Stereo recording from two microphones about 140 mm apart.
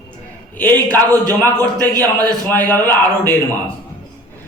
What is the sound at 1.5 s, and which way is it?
Speech, 25° right (ahead or behind).